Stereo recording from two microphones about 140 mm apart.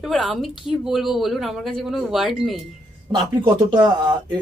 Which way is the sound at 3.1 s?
35° right (ahead or behind).